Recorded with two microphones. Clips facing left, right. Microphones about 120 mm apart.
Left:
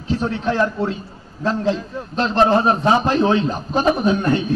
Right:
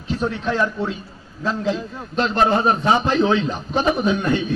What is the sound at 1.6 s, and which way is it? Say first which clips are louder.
A man's voice: left 2 dB; 35° left (ahead or behind).